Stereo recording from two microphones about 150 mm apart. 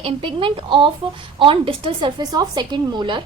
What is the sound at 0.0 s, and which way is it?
A woman's voice, 35° right (ahead or behind).